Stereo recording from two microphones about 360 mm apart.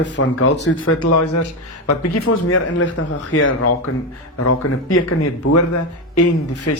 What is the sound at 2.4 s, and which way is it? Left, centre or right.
A man's voice, left.